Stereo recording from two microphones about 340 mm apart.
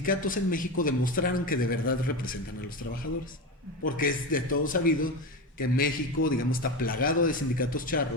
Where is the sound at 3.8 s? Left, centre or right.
Left.